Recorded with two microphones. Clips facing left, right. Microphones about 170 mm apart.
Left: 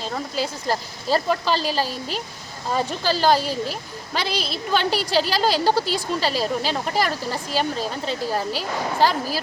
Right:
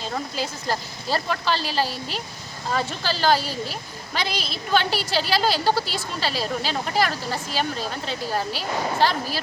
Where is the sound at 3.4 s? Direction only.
45° left (ahead or behind).